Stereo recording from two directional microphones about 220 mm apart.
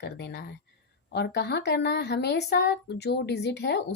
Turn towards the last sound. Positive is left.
turn(degrees=50)  # may be behind; listen again after turning